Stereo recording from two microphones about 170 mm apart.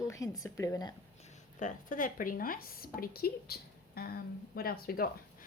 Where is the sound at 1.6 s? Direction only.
50° left (ahead or behind).